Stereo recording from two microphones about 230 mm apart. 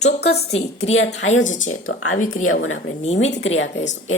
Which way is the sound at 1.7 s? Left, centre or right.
Left.